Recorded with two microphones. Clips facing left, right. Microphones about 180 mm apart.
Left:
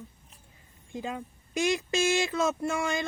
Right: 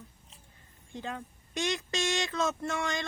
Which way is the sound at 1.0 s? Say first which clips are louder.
Left 3 dB; 15° left (ahead or behind).